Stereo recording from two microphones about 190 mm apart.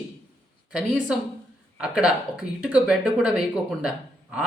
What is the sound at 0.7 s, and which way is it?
Speech, 5° right (ahead or behind).